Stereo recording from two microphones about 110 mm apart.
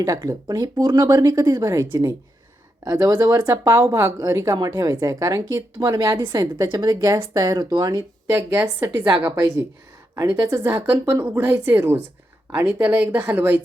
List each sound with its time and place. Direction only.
0.0 s a woman's voice: 30° right (ahead or behind)
8.3 s a woman's voice: 20° right (ahead or behind)